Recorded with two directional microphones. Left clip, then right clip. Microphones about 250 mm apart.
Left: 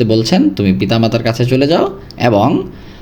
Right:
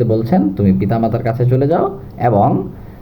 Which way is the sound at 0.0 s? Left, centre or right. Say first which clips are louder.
Left 3 dB; left.